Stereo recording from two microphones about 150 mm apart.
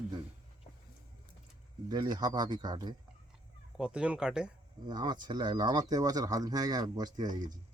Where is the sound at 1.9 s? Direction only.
30° right (ahead or behind).